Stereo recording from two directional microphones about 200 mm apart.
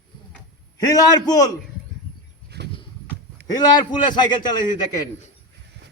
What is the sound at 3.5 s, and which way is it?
A man's voice, 20° left (ahead or behind).